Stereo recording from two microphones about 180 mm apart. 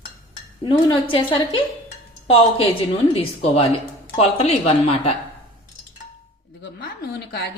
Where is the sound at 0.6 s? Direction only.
30° left (ahead or behind).